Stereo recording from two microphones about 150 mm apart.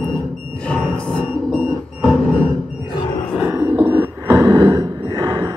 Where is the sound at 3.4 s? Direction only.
15° right (ahead or behind).